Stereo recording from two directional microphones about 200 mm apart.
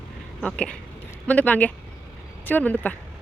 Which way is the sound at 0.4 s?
5° left (ahead or behind).